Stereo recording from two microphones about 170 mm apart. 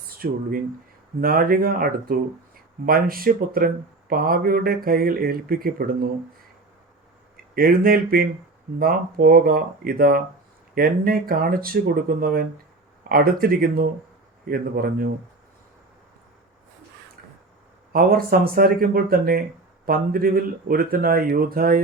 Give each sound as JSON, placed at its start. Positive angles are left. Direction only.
{"t": 0.1, "sound": "speech", "side_deg": -60}
{"t": 7.5, "sound": "speech", "side_deg": -60}
{"t": 17.9, "sound": "speech", "side_deg": -60}